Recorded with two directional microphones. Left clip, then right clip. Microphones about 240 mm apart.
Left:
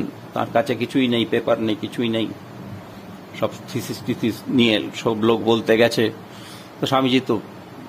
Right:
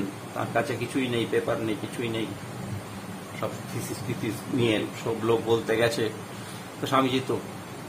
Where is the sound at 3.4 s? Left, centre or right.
Left.